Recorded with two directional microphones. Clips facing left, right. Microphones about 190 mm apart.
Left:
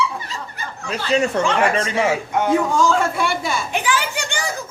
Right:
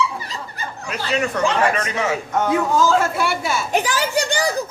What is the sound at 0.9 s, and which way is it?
Speech, 30° left (ahead or behind).